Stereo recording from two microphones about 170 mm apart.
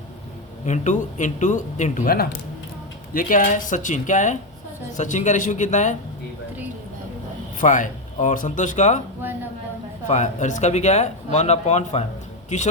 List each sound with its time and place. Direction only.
0.6 s speech: 45° left (ahead or behind)
7.6 s speech: 50° left (ahead or behind)
10.1 s speech: 45° left (ahead or behind)